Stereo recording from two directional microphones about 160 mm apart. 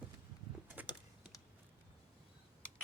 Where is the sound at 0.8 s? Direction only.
10° right (ahead or behind).